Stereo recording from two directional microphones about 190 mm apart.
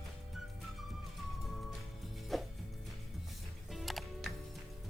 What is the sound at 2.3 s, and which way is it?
Music, centre (ahead or behind).